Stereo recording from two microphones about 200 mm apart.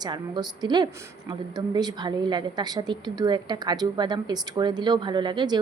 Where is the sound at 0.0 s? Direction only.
20° right (ahead or behind).